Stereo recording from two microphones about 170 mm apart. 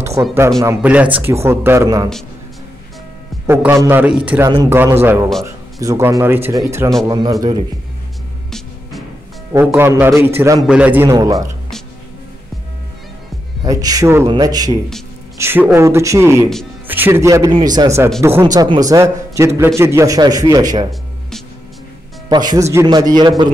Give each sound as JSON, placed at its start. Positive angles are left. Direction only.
{"t": 0.0, "sound": "a man's voice", "side_deg": -15}
{"t": 3.4, "sound": "a man's voice", "side_deg": -15}
{"t": 8.5, "sound": "music", "side_deg": 0}
{"t": 9.5, "sound": "speech", "side_deg": -15}
{"t": 13.7, "sound": "a man's voice", "side_deg": -20}
{"t": 22.3, "sound": "a man's voice", "side_deg": -25}